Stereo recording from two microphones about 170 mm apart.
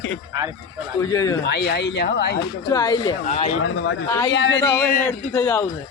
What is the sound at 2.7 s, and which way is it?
Speech, 20° left (ahead or behind).